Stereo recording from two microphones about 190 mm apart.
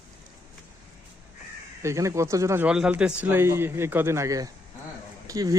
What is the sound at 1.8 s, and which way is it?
Speech, 15° right (ahead or behind).